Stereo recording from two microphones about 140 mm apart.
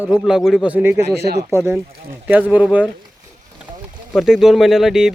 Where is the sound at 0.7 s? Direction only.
10° right (ahead or behind).